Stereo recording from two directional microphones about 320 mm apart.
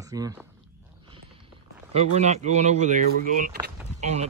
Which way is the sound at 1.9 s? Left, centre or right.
Centre.